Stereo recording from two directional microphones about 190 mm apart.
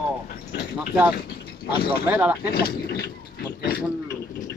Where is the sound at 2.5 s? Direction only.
55° left (ahead or behind).